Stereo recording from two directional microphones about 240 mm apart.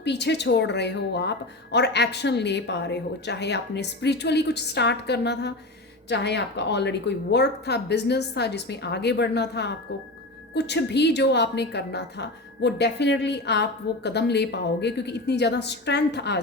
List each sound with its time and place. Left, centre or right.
0.0 s a woman's voice: left